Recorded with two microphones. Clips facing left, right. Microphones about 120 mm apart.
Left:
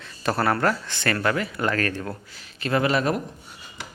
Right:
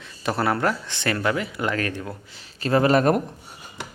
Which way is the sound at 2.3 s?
30° right (ahead or behind).